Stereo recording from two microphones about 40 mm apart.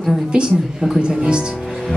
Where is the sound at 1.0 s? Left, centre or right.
Right.